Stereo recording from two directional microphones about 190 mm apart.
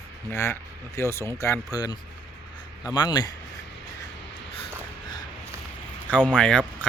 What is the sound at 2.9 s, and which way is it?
Speech, 20° left (ahead or behind).